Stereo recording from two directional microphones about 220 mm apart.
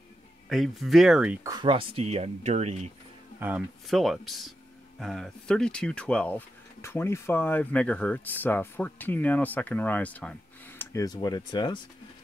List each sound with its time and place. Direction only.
0.5 s speech: centre (ahead or behind)
1.5 s speech: 20° right (ahead or behind)
3.3 s speech: 5° right (ahead or behind); by 11.8 s 20° left (ahead or behind)